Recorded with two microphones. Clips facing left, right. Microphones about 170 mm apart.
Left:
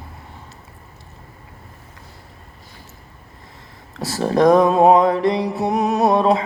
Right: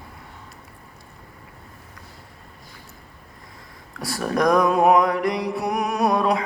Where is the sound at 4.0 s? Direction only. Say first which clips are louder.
Left 6 dB; 25° left (ahead or behind).